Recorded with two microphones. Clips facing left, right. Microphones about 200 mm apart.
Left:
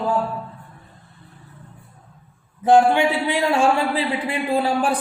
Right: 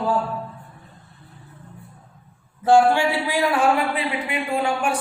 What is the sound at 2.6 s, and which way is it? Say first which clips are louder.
Speech: left 1 dB; 20° left (ahead or behind).